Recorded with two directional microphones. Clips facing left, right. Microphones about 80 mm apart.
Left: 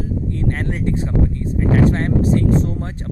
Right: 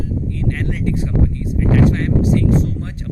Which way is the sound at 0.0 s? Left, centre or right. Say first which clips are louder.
Even; left.